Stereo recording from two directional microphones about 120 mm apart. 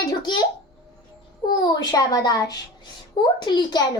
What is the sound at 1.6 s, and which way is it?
A child's voice, 35° left (ahead or behind).